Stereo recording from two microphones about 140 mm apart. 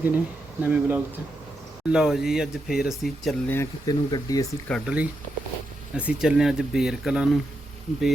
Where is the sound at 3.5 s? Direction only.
20° left (ahead or behind).